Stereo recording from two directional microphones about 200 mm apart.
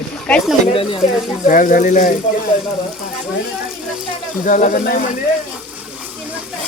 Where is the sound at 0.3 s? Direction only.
5° left (ahead or behind).